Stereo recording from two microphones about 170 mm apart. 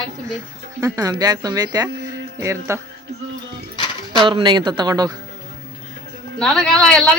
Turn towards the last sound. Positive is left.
turn(degrees=5)  # may be behind; listen again after turning